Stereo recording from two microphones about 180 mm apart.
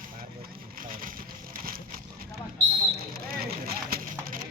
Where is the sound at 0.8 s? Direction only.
50° right (ahead or behind).